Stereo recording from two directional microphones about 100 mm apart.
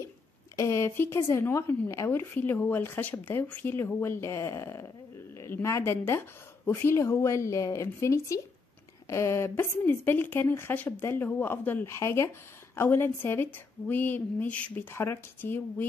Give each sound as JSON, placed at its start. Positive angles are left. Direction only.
{"t": 0.6, "sound": "speech", "side_deg": 30}